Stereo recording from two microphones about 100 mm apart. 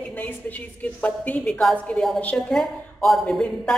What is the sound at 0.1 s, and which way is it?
A woman's voice, 15° left (ahead or behind).